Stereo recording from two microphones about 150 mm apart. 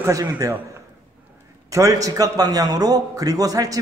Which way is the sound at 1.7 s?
20° right (ahead or behind).